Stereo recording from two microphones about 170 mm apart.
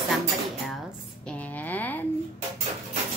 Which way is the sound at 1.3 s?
10° left (ahead or behind).